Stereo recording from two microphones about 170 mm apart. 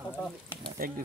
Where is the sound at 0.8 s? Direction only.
60° right (ahead or behind).